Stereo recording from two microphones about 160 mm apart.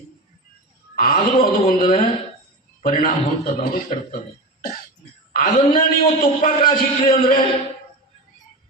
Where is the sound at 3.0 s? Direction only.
50° left (ahead or behind).